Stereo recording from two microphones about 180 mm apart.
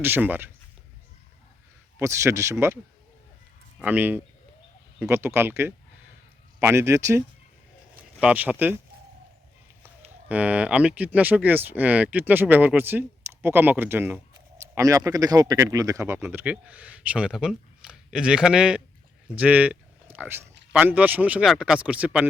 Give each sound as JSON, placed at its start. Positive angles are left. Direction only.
{"t": 0.0, "sound": "speech", "side_deg": -10}
{"t": 2.0, "sound": "speech", "side_deg": -15}
{"t": 3.8, "sound": "speech", "side_deg": -10}
{"t": 10.2, "sound": "speech", "side_deg": -10}